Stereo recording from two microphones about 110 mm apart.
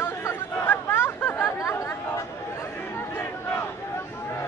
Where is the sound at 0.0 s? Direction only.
25° left (ahead or behind).